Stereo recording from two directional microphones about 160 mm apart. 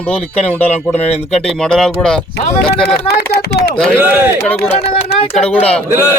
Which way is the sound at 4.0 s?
10° right (ahead or behind).